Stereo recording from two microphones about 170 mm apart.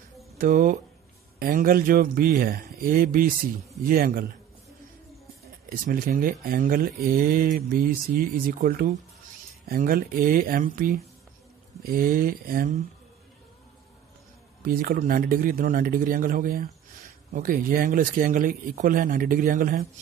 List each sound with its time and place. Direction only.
0.4 s speech: 50° right (ahead or behind)
5.7 s speech: 55° right (ahead or behind)
14.6 s speech: 60° right (ahead or behind)